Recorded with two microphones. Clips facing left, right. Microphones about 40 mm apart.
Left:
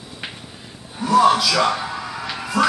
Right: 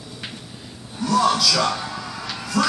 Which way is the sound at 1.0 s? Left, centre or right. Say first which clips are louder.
Left 4 dB; centre.